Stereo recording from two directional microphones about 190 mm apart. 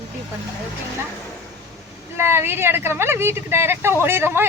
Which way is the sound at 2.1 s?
10° right (ahead or behind).